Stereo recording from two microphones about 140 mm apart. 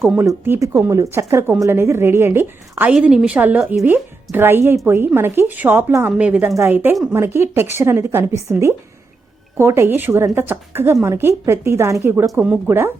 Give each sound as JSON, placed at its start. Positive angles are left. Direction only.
{"t": 0.3, "sound": "speech", "side_deg": -20}